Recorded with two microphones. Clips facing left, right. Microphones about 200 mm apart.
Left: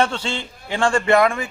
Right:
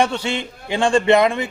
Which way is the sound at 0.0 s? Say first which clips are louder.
Right 2 dB; 15° right (ahead or behind).